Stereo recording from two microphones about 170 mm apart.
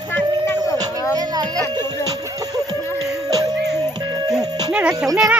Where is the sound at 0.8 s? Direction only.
20° right (ahead or behind).